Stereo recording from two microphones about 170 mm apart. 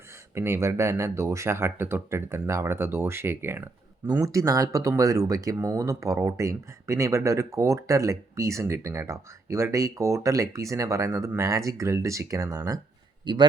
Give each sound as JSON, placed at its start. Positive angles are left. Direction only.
{"t": 0.3, "sound": "speech", "side_deg": -15}